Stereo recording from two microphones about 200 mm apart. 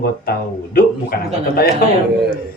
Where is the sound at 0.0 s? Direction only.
50° left (ahead or behind).